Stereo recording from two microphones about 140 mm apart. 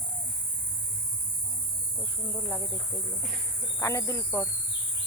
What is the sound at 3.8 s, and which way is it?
Speech, 20° left (ahead or behind).